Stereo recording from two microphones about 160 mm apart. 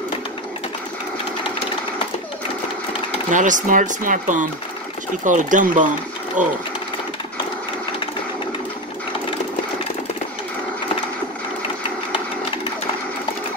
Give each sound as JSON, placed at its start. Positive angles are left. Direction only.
{"t": 3.3, "sound": "speech", "side_deg": -50}